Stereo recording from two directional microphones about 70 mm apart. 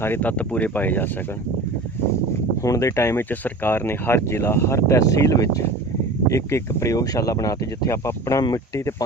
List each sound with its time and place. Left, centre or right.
0.0 s speech: left
2.6 s speech: left
3.2 s speech: left